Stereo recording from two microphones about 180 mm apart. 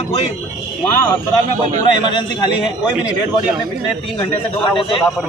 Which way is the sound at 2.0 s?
25° left (ahead or behind).